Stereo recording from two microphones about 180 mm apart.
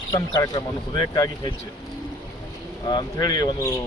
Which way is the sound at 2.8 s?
25° left (ahead or behind).